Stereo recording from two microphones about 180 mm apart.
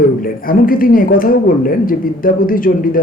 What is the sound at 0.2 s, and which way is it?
Speech, 50° left (ahead or behind).